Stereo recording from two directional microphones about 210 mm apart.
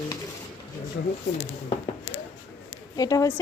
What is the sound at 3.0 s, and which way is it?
Speech, 15° left (ahead or behind).